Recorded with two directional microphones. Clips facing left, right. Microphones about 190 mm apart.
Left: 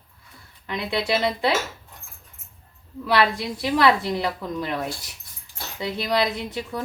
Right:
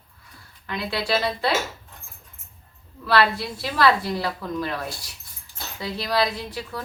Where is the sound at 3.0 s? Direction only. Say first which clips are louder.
Even; 15° left (ahead or behind).